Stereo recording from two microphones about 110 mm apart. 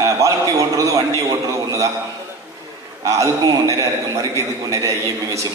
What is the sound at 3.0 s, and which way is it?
A man's voice, 30° right (ahead or behind).